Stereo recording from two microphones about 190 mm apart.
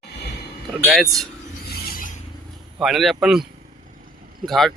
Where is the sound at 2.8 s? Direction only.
Centre (ahead or behind).